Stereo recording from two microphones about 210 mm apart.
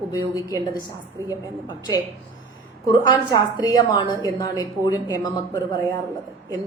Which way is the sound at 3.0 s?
20° left (ahead or behind).